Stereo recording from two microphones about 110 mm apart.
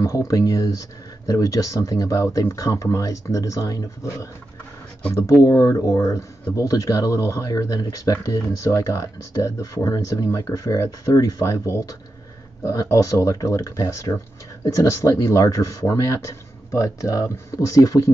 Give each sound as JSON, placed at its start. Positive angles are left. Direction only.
{"t": 0.0, "sound": "speech", "side_deg": 30}
{"t": 5.4, "sound": "speech", "side_deg": 30}